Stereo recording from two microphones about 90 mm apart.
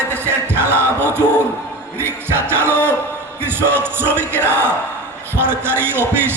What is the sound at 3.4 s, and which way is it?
Music, 25° right (ahead or behind).